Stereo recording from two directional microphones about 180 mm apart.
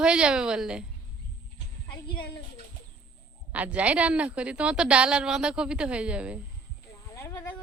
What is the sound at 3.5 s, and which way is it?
A woman's voice, 5° right (ahead or behind).